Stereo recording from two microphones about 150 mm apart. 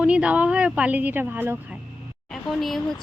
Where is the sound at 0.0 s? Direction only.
10° right (ahead or behind).